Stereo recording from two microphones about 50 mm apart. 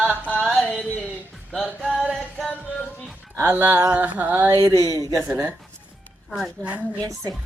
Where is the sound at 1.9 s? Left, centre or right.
Right.